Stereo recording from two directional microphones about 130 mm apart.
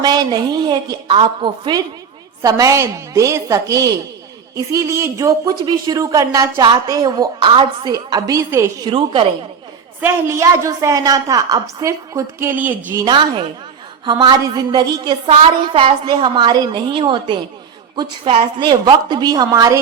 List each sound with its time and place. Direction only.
0.0 s a woman's voice: 30° right (ahead or behind)
2.4 s a woman's voice: 25° right (ahead or behind)
8.8 s a woman's voice: 40° right (ahead or behind)
10.0 s a woman's voice: 20° right (ahead or behind)
13.1 s a woman's voice: 40° right (ahead or behind)
15.3 s a woman's voice: 45° right (ahead or behind)
18.3 s a woman's voice: 50° right (ahead or behind)
18.7 s a woman's voice: 35° right (ahead or behind)